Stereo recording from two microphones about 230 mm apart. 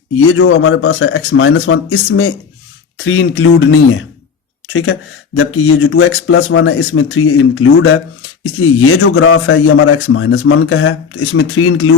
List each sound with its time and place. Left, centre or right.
0.3 s speech: left